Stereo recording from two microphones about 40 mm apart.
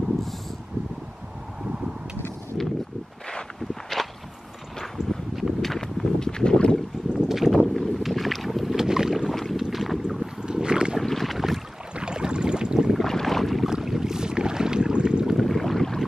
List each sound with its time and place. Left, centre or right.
3.9 s walk: centre
5.0 s a sound: centre
5.3 s a sound: centre
6.1 s boat: centre
7.2 s boat: centre
9.3 s boat: centre
9.6 s boat: centre
10.4 s boat: right
11.0 s boat: centre
11.9 s boat: right
12.9 s boat: centre
13.7 s boat: centre
15.3 s boat: centre